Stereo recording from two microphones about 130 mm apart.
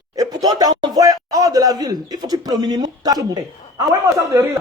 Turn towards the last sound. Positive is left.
turn(degrees=-25)  # may be behind; listen again after turning